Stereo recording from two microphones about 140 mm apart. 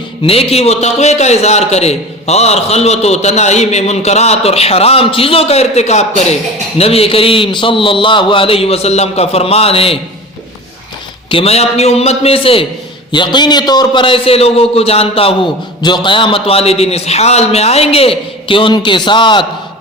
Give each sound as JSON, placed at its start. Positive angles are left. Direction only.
{"t": 0.2, "sound": "a man's voice", "side_deg": 45}
{"t": 11.3, "sound": "a man's voice", "side_deg": 45}